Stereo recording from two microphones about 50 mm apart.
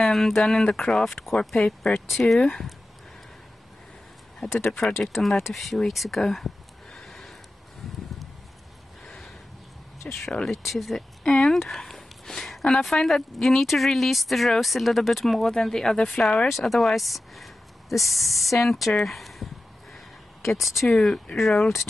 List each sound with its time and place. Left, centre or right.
0.0 s speech: centre
4.6 s speech: centre
5.9 s a sound: centre
10.1 s speech: left
10.4 s speech: centre
16.4 s speech: centre